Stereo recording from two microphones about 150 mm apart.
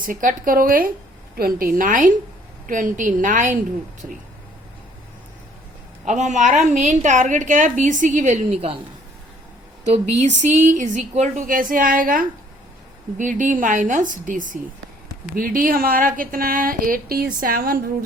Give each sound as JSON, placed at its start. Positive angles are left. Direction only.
{"t": 0.0, "sound": "a woman's voice", "side_deg": -65}
{"t": 6.1, "sound": "a woman's voice", "side_deg": -50}
{"t": 9.8, "sound": "a woman's voice", "side_deg": -50}
{"t": 13.1, "sound": "a woman's voice", "side_deg": -60}
{"t": 15.4, "sound": "speech", "side_deg": -70}